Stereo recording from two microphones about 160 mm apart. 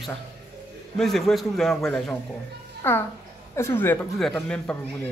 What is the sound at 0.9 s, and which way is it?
A man's voice, centre (ahead or behind).